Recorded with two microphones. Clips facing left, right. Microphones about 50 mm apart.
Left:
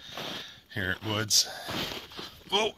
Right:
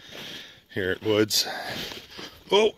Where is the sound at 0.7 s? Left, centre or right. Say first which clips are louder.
Right 7 dB; centre.